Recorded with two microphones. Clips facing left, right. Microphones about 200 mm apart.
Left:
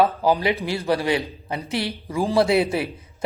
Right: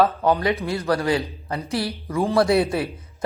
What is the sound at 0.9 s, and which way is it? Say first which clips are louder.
A man's voice: even; 25° left (ahead or behind).